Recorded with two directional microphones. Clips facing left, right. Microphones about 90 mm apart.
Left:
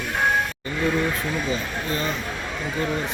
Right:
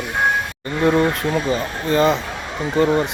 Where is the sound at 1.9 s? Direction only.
75° right (ahead or behind).